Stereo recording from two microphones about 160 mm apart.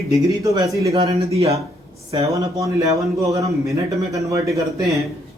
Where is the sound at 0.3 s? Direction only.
20° right (ahead or behind).